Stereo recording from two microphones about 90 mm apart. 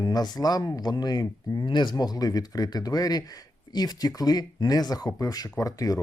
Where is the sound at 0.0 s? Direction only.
50° left (ahead or behind).